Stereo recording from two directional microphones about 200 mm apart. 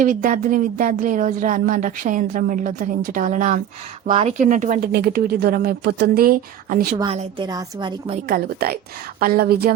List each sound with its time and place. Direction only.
0.0 s a woman's voice: 40° right (ahead or behind)
6.9 s a woman's voice: 30° right (ahead or behind)
8.3 s a woman's voice: 50° right (ahead or behind)